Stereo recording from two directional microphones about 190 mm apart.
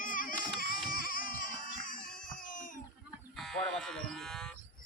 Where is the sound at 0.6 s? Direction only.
50° left (ahead or behind).